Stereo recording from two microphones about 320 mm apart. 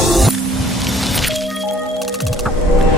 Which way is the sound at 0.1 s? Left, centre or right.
Centre.